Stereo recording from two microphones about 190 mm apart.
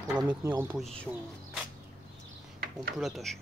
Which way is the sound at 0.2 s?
20° right (ahead or behind).